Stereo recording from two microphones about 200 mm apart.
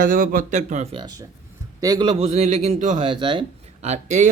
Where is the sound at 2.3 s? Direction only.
35° right (ahead or behind).